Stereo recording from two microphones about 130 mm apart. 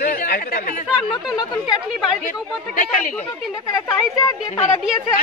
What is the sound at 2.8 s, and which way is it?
Speech, 80° left.